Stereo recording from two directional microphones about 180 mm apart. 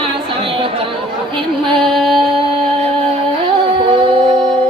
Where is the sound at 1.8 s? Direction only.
Centre (ahead or behind).